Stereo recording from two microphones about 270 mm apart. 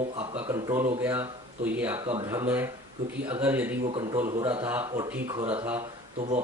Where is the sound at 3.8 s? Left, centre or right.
Centre.